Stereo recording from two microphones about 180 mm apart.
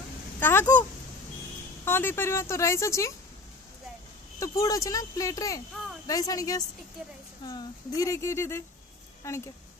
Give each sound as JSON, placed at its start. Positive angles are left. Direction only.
{"t": 0.4, "sound": "speech", "side_deg": 10}
{"t": 1.9, "sound": "speech", "side_deg": 10}
{"t": 4.4, "sound": "speech", "side_deg": 20}